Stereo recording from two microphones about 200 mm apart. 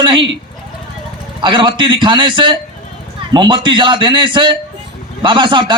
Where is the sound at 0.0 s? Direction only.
25° right (ahead or behind).